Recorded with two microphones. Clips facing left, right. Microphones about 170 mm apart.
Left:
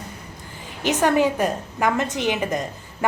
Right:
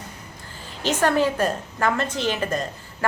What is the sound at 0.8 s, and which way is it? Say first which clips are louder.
A woman's voice: left 2 dB; 15° left (ahead or behind).